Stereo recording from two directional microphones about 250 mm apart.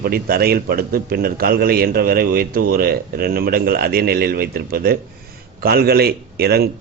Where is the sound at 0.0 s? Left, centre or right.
Right.